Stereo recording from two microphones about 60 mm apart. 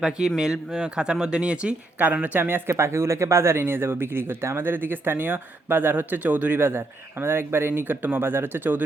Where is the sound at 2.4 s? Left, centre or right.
Right.